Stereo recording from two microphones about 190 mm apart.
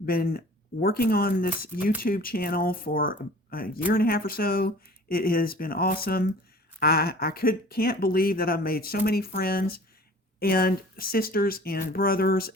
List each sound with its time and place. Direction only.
0.0 s speech: 50° left (ahead or behind)